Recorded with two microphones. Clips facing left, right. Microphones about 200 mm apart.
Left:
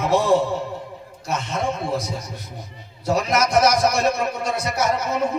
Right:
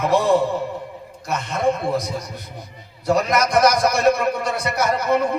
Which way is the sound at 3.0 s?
60° right (ahead or behind).